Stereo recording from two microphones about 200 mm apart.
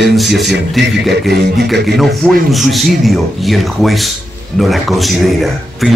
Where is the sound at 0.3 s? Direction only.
55° right (ahead or behind).